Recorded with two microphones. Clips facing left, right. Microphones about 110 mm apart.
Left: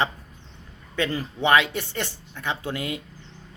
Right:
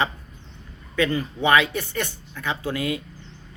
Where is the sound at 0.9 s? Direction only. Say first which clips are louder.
Right 3 dB; 30° left (ahead or behind).